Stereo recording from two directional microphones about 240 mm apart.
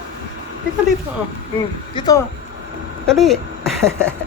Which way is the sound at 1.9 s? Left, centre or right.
Centre.